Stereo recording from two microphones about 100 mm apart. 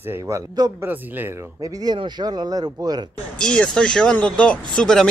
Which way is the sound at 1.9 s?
45° right (ahead or behind).